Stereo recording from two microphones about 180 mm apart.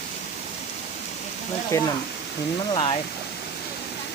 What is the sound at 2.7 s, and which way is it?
Speech, 30° left (ahead or behind).